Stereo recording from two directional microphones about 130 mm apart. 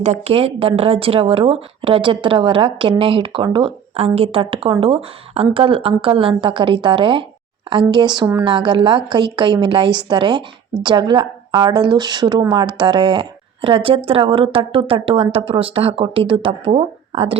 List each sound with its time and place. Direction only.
0.0 s a woman's voice: 55° right (ahead or behind)